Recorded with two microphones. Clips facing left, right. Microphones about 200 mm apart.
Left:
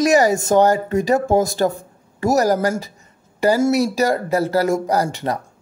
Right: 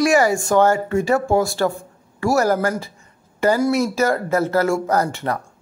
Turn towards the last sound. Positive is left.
turn(degrees=15)  # may be behind; listen again after turning